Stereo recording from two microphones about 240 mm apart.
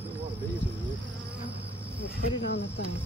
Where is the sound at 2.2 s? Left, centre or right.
Left.